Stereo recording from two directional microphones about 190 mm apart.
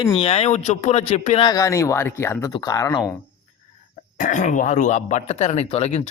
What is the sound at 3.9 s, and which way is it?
Speech, 40° left (ahead or behind).